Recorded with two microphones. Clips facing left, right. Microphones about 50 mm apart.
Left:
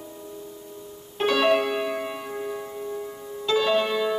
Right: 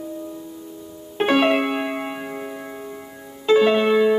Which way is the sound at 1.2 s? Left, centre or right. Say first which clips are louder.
Right 3 dB; right.